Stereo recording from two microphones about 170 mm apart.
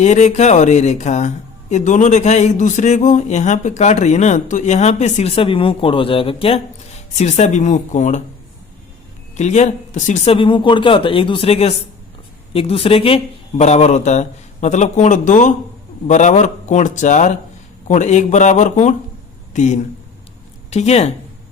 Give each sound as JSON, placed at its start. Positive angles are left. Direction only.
{"t": 0.0, "sound": "speech", "side_deg": 45}
{"t": 9.3, "sound": "speech", "side_deg": 45}
{"t": 10.3, "sound": "speech", "side_deg": 30}